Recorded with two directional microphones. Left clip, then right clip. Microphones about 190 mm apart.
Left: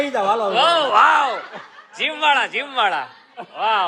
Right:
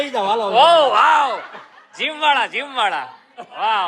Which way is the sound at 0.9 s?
15° left (ahead or behind).